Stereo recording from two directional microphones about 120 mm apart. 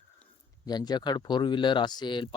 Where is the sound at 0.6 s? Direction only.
35° left (ahead or behind).